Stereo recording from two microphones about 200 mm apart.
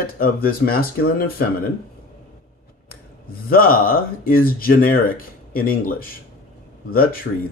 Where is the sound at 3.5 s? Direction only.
45° left (ahead or behind).